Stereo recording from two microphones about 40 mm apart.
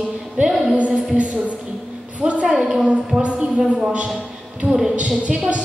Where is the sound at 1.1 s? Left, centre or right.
Right.